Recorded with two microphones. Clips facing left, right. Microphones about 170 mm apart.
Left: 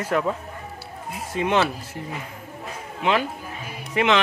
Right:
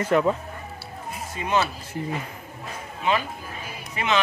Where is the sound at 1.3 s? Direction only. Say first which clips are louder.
Left 3 dB; 85° left.